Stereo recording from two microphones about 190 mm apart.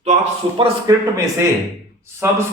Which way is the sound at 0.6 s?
25° right (ahead or behind).